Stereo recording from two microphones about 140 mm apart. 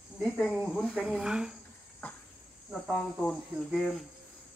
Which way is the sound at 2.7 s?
5° left (ahead or behind).